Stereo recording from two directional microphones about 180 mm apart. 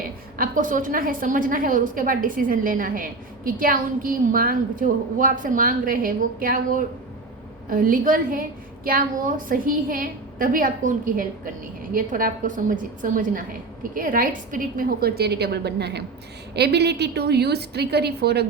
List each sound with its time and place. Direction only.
0.0 s a woman's voice: 50° right (ahead or behind)